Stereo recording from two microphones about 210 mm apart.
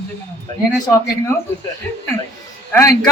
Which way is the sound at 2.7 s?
15° left (ahead or behind).